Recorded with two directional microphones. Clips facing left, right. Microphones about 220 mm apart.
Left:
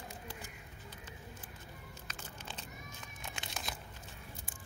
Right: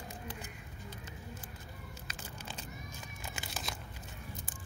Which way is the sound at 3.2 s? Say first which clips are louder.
Right 1 dB; 5° right (ahead or behind).